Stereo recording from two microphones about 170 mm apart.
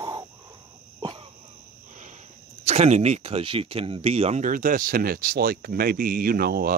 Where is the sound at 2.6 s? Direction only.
40° right (ahead or behind).